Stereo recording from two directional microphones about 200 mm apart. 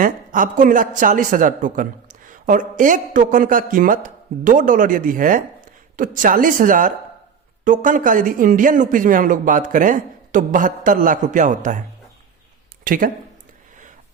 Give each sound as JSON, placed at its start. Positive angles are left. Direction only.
{"t": 0.0, "sound": "a woman's voice", "side_deg": -40}
{"t": 12.8, "sound": "speech", "side_deg": -45}